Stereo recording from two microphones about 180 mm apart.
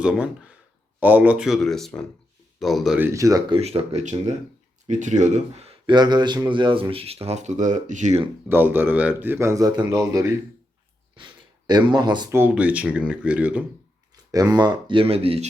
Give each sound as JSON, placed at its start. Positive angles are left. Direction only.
{"t": 0.0, "sound": "speech", "side_deg": -5}
{"t": 3.1, "sound": "speech", "side_deg": -20}
{"t": 3.6, "sound": "speech", "side_deg": -35}
{"t": 8.4, "sound": "a man's voice", "side_deg": -10}
{"t": 12.4, "sound": "a man's voice", "side_deg": -10}
{"t": 14.3, "sound": "speech", "side_deg": -20}